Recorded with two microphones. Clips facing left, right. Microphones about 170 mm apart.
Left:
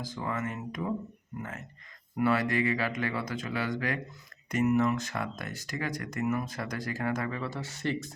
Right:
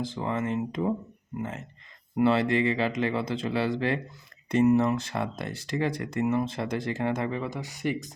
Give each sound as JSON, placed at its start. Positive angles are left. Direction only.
{"t": 0.0, "sound": "speech", "side_deg": -25}